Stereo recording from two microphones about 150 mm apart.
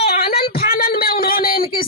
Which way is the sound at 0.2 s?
90° left.